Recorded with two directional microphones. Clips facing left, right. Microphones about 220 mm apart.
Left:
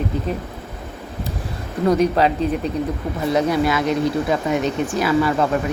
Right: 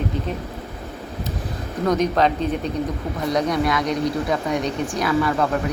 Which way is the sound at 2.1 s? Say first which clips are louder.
Left 2 dB; 5° left (ahead or behind).